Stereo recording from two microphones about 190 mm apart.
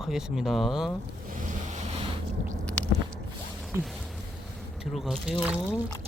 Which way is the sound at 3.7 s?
15° right (ahead or behind).